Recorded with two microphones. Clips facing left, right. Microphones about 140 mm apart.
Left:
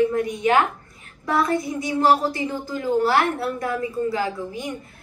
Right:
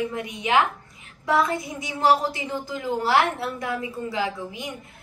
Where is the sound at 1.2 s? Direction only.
20° right (ahead or behind).